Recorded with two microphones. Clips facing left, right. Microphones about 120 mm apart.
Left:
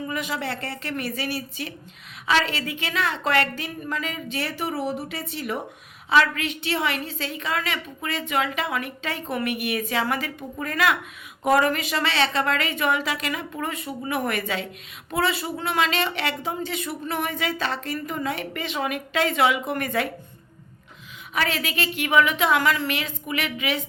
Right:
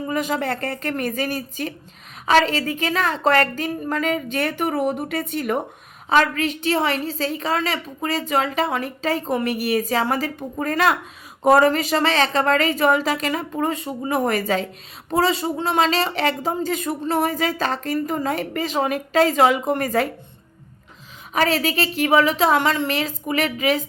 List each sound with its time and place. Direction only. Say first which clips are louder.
0.0 s a woman's voice: right 5 dB; 40° right (ahead or behind)
21.3 s speech: right 6 dB; 35° right (ahead or behind)